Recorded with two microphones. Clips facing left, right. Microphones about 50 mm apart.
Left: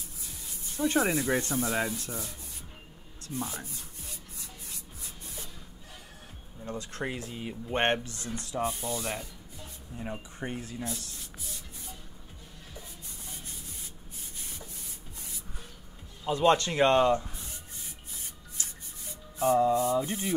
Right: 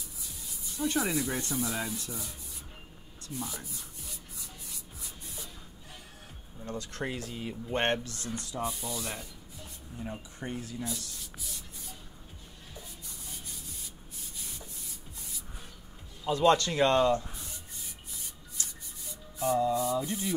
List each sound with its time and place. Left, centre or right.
0.7 s speech: left
3.3 s speech: left
7.0 s speech: centre
7.7 s speech: left
9.0 s speech: left
10.7 s speech: left
16.3 s speech: centre
18.6 s rub: left
19.3 s speech: left